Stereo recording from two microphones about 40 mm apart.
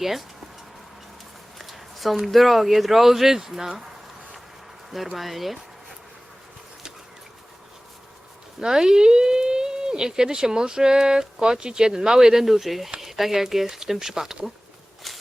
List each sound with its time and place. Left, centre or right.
0.0 s speech: centre
1.5 s speech: centre
5.1 s speech: centre
8.6 s speech: centre
15.1 s walk: centre